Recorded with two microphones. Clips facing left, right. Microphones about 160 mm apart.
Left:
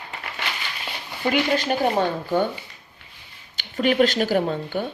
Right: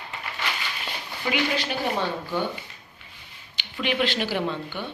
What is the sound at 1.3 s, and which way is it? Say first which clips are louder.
Speech: left 5 dB; 45° left (ahead or behind).